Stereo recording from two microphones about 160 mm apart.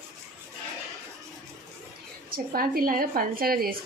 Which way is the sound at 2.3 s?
65° right (ahead or behind).